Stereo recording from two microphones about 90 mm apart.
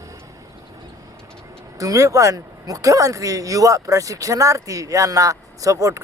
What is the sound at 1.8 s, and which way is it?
Speech, 40° right (ahead or behind).